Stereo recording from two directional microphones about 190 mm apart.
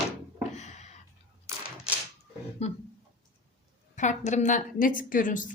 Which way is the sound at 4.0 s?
40° left (ahead or behind).